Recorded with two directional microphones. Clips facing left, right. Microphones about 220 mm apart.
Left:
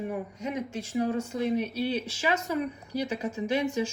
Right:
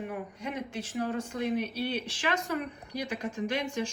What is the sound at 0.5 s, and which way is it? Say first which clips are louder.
Speech: left 4 dB; 10° left (ahead or behind).